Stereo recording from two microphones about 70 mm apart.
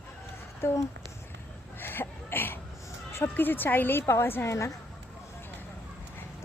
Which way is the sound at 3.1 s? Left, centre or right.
Left.